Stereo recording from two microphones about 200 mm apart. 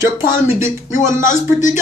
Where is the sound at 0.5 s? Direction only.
40° left (ahead or behind).